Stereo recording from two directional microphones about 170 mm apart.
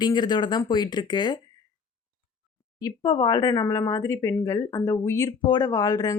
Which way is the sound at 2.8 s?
25° left (ahead or behind).